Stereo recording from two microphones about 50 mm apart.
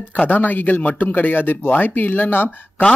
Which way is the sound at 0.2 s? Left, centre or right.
Left.